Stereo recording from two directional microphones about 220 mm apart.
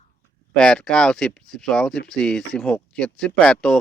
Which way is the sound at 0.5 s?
5° left (ahead or behind).